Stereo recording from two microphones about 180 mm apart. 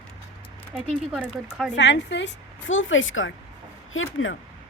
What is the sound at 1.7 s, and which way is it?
Speech, 80° left.